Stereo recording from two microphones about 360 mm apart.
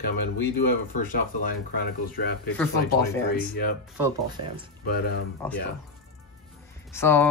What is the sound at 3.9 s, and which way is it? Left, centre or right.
Speech, centre.